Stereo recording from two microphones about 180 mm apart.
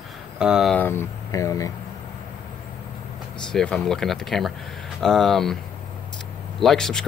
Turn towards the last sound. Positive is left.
turn(degrees=5)  # may be behind; listen again after turning